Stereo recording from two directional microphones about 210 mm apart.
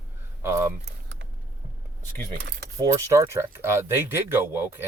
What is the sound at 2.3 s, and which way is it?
Speech, 55° right (ahead or behind).